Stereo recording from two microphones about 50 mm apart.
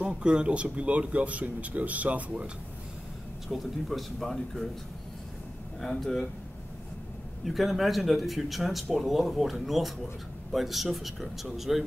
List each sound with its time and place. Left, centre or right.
0.0 s speech: centre
3.4 s speech: centre
5.8 s speech: centre
7.4 s speech: centre